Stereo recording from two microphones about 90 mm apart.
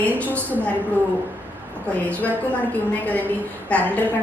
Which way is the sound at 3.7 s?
15° left (ahead or behind).